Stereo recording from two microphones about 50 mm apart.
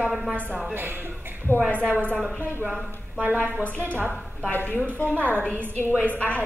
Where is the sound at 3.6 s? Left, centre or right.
Left.